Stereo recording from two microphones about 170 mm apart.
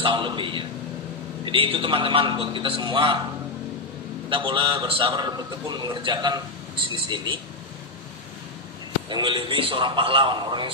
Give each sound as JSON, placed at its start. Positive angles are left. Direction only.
{"t": 0.0, "sound": "a man's voice", "side_deg": -30}
{"t": 4.3, "sound": "a man's voice", "side_deg": -30}
{"t": 9.1, "sound": "a man's voice", "side_deg": -30}